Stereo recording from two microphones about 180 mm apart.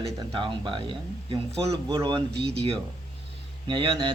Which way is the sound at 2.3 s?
65° right (ahead or behind).